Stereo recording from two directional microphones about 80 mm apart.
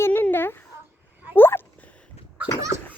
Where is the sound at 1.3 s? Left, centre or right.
Left.